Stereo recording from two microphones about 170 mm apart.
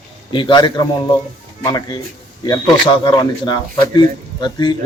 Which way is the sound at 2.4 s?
25° left (ahead or behind).